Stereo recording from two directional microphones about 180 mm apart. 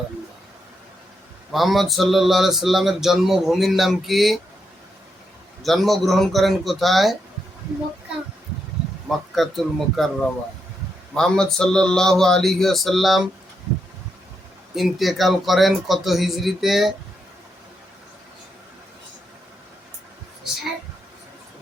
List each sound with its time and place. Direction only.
1.5 s speech: centre (ahead or behind)
5.6 s speech: centre (ahead or behind)
9.0 s speech: centre (ahead or behind)
14.8 s speech: centre (ahead or behind)